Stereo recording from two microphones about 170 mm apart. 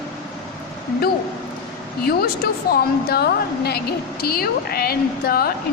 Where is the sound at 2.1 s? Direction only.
65° left (ahead or behind).